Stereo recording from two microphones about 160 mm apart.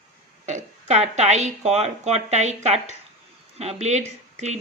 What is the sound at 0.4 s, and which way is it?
A woman's voice, 45° right (ahead or behind).